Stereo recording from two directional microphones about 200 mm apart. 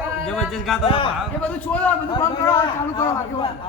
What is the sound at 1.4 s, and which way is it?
Speech, 5° left (ahead or behind).